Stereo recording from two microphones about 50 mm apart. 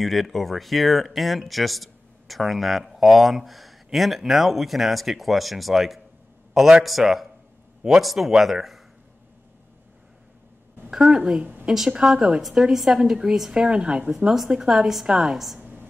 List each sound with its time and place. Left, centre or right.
0.0 s speech: centre
10.9 s a woman's voice: centre
14.1 s a woman's voice: centre
15.6 s a sound: right